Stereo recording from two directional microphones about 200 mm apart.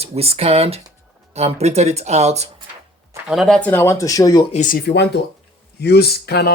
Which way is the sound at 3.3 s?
Centre (ahead or behind).